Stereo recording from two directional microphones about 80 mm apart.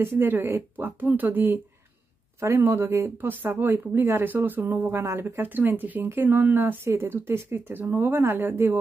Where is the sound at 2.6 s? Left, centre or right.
Right.